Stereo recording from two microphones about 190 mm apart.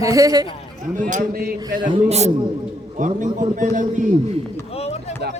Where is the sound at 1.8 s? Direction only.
30° right (ahead or behind).